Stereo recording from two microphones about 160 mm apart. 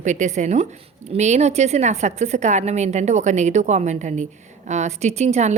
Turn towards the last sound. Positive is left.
turn(degrees=-45)  # may be behind; listen again after turning